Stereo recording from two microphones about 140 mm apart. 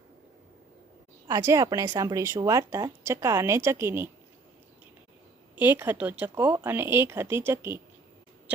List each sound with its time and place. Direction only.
1.3 s a woman's voice: 20° right (ahead or behind)
5.5 s speech: 15° right (ahead or behind)